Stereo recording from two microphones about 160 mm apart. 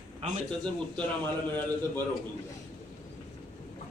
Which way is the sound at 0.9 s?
10° left (ahead or behind).